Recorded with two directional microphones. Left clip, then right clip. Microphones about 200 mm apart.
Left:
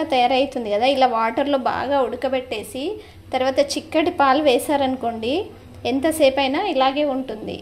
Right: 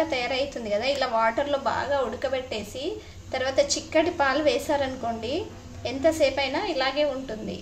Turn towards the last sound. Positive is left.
turn(degrees=30)  # may be behind; listen again after turning